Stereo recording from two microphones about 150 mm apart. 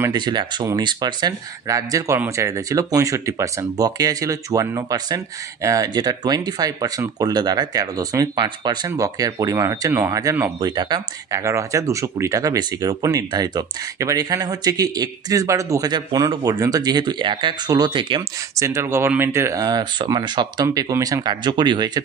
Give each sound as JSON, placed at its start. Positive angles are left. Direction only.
{"t": 0.0, "sound": "speech", "side_deg": -30}
{"t": 18.5, "sound": "speech", "side_deg": -20}